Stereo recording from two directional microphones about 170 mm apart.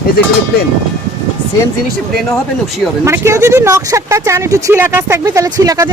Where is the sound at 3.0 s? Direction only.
15° right (ahead or behind).